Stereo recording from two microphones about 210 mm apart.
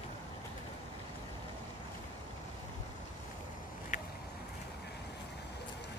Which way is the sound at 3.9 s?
35° left (ahead or behind).